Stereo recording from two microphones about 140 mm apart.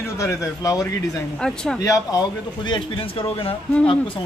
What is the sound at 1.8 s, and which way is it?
A man's voice, 25° left (ahead or behind).